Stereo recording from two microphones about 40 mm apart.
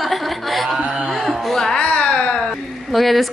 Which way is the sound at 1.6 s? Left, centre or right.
Centre.